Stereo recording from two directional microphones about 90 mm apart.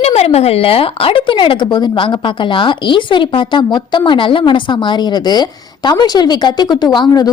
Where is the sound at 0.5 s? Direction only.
90° left.